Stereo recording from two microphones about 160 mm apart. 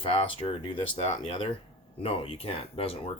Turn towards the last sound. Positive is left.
turn(degrees=35)  # may be behind; listen again after turning